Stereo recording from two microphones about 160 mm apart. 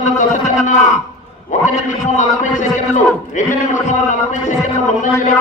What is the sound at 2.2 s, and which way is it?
A man's voice, 50° left (ahead or behind).